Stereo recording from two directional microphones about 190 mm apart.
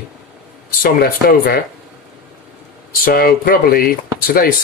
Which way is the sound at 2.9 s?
50° left (ahead or behind).